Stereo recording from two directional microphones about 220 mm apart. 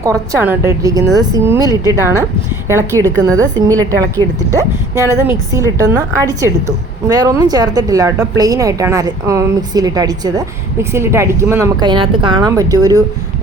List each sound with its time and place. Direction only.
0.0 s a woman's voice: 15° right (ahead or behind)
3.0 s a woman's voice: 5° left (ahead or behind)
3.2 s a woman's voice: 15° right (ahead or behind)